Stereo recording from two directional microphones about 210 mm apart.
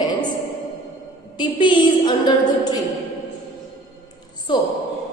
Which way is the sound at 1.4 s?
20° left (ahead or behind).